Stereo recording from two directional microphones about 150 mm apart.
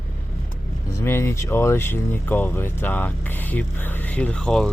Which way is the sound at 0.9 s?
15° left (ahead or behind).